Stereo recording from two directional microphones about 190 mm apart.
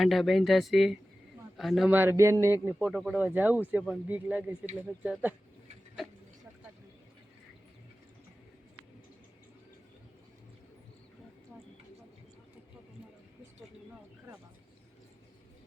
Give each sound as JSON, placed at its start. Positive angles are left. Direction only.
{"t": 0.0, "sound": "a man's voice", "side_deg": 0}